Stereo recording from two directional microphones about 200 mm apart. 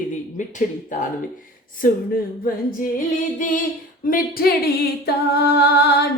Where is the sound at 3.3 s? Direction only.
40° left (ahead or behind).